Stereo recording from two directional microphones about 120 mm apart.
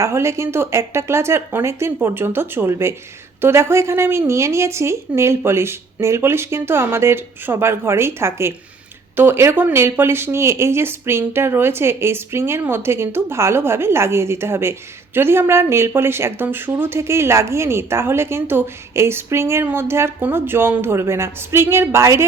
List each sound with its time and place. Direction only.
0.0 s speech: 25° right (ahead or behind)